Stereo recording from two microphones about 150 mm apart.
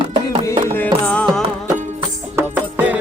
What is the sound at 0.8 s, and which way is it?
Music, 10° left (ahead or behind).